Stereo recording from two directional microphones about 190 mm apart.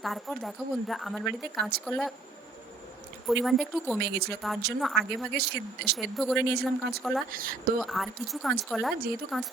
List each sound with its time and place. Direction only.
0.0 s a woman's voice: centre (ahead or behind)
3.2 s a woman's voice: centre (ahead or behind)
4.0 s speech: 60° right (ahead or behind)
4.8 s a woman's voice: centre (ahead or behind)
5.3 s speech: 60° right (ahead or behind)
6.0 s a woman's voice: centre (ahead or behind)
6.5 s speech: 55° right (ahead or behind)
7.0 s a woman's voice: centre (ahead or behind)
7.3 s speech: 50° right (ahead or behind)
7.8 s a woman's voice: centre (ahead or behind)